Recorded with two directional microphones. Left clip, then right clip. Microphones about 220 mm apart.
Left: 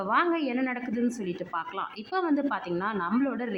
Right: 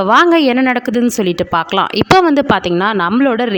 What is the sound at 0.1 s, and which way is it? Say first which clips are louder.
A woman's voice: right 16 dB; 45° right (ahead or behind).